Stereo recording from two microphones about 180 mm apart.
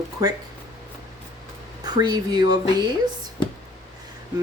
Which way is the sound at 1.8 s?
25° right (ahead or behind).